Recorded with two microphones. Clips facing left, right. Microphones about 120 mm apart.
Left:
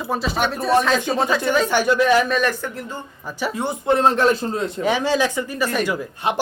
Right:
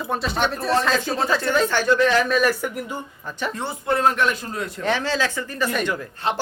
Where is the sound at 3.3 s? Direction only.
10° left (ahead or behind); by 4.8 s 25° left (ahead or behind).